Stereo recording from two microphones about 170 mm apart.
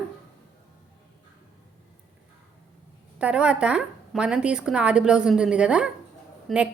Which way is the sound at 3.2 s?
5° right (ahead or behind).